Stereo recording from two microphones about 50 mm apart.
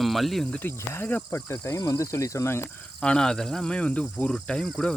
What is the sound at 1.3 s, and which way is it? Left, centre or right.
Speech, left.